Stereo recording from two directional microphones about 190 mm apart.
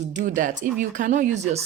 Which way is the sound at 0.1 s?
40° right (ahead or behind).